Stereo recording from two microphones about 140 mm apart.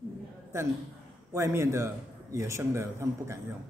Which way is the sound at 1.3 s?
20° right (ahead or behind).